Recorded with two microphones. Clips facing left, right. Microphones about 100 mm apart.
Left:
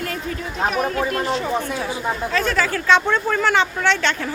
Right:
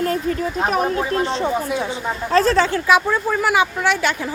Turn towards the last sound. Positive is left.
turn(degrees=-10)  # may be behind; listen again after turning